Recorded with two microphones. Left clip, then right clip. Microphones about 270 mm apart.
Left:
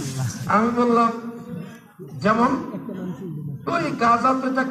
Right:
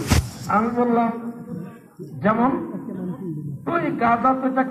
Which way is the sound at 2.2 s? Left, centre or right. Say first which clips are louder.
Left 1 dB; left.